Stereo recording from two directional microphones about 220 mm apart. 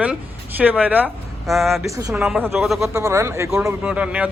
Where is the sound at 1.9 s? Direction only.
15° right (ahead or behind).